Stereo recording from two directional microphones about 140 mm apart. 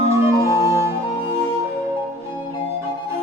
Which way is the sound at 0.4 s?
20° right (ahead or behind).